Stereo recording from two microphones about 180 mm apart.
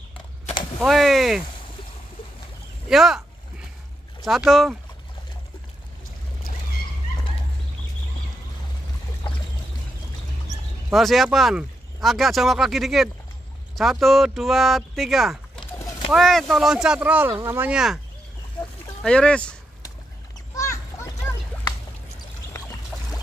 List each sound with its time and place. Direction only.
0.7 s speech: centre (ahead or behind)
2.9 s speech: centre (ahead or behind)
10.9 s speech: centre (ahead or behind)
19.0 s speech: 5° left (ahead or behind)
20.5 s splash: 15° left (ahead or behind)
22.5 s boat: 20° left (ahead or behind)
22.9 s pour: centre (ahead or behind)